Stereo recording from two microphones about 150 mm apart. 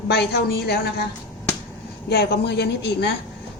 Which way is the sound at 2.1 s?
90° left.